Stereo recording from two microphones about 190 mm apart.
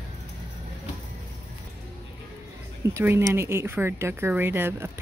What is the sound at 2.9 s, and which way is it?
A woman's voice, 15° right (ahead or behind).